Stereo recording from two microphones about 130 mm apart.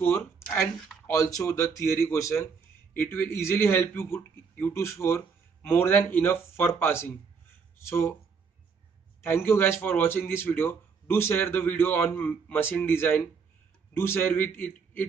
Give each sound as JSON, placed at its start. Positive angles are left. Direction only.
{"t": 0.0, "sound": "a man's voice", "side_deg": 20}
{"t": 9.2, "sound": "speech", "side_deg": 15}